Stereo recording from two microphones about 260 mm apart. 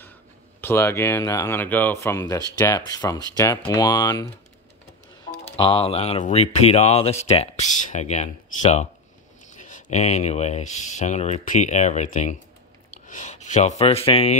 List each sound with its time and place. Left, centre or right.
0.6 s speech: centre
5.4 s speech: centre